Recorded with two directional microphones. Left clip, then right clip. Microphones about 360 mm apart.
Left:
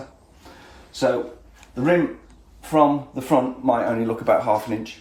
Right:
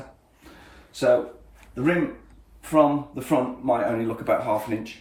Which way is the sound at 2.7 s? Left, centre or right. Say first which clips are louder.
Left 2 dB; centre.